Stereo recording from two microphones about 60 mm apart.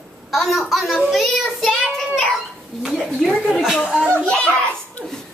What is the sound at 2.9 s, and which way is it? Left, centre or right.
Speech, centre.